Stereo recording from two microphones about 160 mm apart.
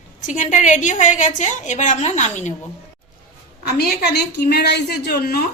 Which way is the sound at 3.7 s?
90° left.